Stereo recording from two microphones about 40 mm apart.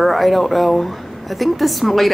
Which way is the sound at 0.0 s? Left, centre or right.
Centre.